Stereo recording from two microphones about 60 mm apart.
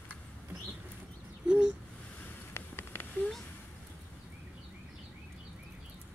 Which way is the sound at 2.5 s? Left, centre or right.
Left.